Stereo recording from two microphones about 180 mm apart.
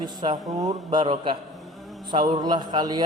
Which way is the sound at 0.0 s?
25° right (ahead or behind).